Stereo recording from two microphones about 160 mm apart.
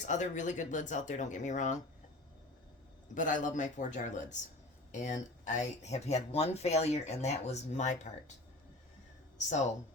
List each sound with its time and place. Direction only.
0.0 s speech: 50° left (ahead or behind)
3.2 s speech: 55° left (ahead or behind)